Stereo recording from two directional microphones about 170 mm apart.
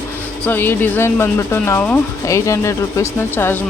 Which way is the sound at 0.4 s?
10° left (ahead or behind).